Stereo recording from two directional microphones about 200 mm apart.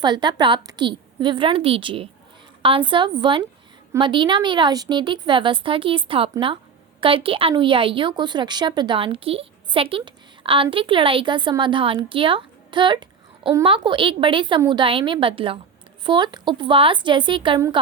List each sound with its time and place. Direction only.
0.0 s a woman's voice: 20° right (ahead or behind)